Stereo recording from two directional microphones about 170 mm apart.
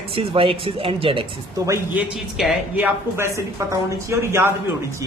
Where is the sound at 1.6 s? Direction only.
15° right (ahead or behind).